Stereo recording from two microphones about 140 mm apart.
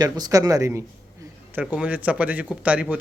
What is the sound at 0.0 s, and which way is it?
Speech, 25° right (ahead or behind).